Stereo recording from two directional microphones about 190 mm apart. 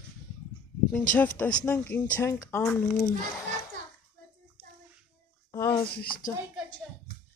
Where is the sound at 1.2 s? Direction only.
5° left (ahead or behind).